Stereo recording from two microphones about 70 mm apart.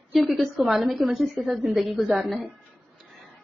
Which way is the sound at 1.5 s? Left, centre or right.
Centre.